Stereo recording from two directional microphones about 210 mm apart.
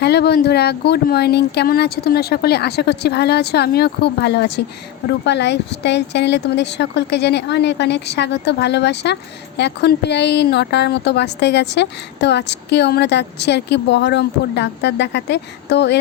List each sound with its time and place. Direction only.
0.0 s a woman's voice: 50° left (ahead or behind)